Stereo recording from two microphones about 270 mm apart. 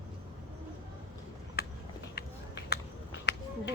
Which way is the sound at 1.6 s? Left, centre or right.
Left.